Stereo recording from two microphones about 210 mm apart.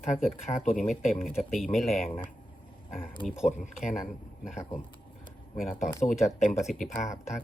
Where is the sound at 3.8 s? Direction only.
5° right (ahead or behind).